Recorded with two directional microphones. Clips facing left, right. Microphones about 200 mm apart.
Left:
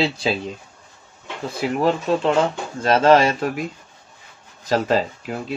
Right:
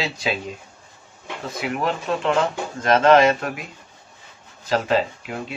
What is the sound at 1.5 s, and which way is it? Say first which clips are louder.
Speech: left 5 dB; 30° left (ahead or behind).